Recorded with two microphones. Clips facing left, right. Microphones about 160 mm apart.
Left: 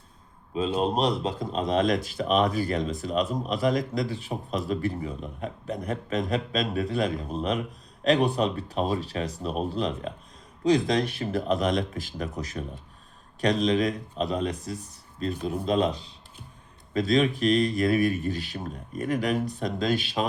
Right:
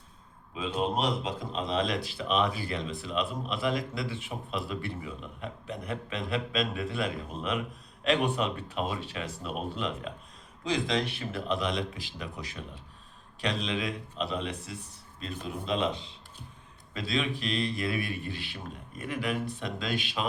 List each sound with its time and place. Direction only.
0.5 s speech: 35° left (ahead or behind)